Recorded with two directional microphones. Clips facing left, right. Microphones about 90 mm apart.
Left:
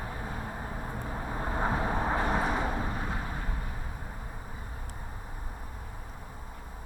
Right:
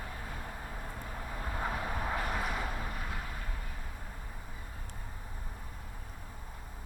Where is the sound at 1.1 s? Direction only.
35° left (ahead or behind).